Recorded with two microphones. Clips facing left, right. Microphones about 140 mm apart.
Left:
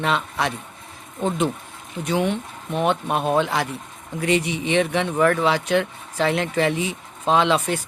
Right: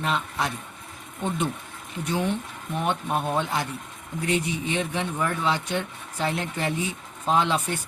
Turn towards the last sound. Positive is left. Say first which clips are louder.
# left 4 dB
turn(degrees=90)